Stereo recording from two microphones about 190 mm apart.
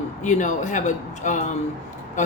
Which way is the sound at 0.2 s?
40° left (ahead or behind).